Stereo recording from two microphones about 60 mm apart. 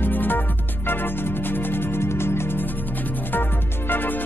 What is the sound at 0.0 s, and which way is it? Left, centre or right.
Music, left.